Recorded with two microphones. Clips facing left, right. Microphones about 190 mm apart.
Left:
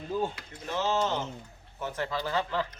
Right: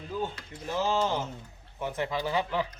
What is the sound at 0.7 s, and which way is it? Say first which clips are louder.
Speech: right 1 dB; 10° right (ahead or behind).